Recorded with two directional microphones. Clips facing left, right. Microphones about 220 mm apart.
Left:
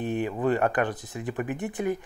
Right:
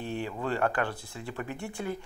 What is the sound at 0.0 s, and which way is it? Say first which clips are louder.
Speech: left 7 dB; 20° left (ahead or behind).